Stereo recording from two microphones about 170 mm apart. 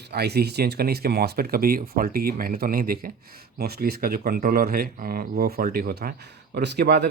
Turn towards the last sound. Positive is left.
turn(degrees=-75)  # may be behind; listen again after turning